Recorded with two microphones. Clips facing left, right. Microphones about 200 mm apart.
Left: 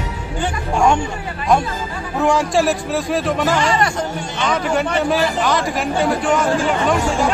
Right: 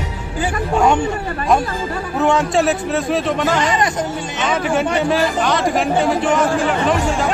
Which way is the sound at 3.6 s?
20° right (ahead or behind).